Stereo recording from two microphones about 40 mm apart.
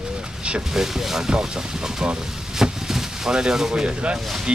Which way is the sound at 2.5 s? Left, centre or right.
Centre.